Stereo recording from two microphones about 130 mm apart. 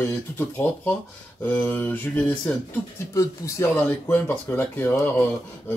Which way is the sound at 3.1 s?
25° left (ahead or behind).